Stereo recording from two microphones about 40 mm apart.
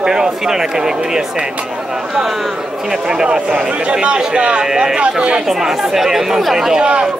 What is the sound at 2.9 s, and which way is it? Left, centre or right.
A man's voice, centre.